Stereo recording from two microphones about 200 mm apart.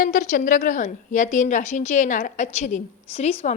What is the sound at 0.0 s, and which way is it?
A woman's voice, 40° left (ahead or behind).